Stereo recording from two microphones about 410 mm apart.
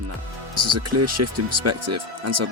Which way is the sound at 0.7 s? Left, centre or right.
Right.